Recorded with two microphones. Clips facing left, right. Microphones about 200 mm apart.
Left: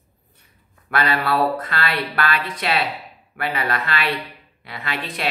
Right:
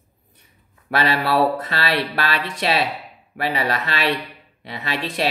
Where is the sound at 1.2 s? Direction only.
25° right (ahead or behind).